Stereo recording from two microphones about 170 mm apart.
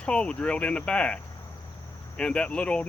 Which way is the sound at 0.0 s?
5° left (ahead or behind).